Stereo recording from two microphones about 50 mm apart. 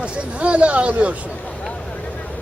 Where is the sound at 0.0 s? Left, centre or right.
Right.